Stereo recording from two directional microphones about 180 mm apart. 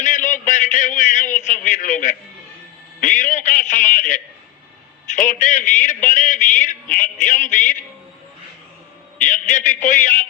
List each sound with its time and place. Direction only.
0.0 s a sound: 45° left (ahead or behind)
5.1 s a man's voice: 45° left (ahead or behind)
9.2 s a man's voice: 45° left (ahead or behind)